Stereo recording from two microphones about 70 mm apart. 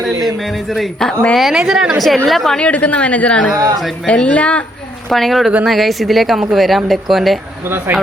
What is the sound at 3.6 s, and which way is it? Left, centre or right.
Speech, right.